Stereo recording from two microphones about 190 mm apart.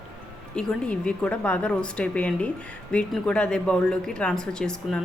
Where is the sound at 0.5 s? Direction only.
5° left (ahead or behind).